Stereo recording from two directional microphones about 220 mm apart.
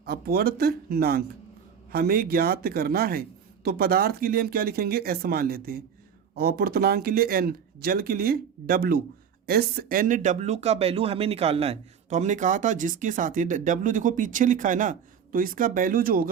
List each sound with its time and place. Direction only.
0.0 s speech: 45° right (ahead or behind)